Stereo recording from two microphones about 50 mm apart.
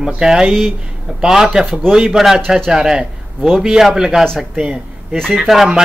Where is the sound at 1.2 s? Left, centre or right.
Centre.